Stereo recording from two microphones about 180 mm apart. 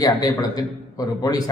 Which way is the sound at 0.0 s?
20° left (ahead or behind).